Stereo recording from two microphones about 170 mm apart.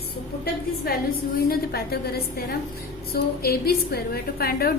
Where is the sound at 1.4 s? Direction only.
65° left (ahead or behind).